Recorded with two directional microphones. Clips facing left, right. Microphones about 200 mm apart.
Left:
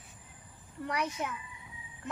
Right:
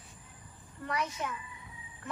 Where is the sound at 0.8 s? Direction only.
15° left (ahead or behind).